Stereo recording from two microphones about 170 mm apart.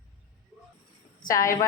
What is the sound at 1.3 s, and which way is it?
Speech, 20° left (ahead or behind).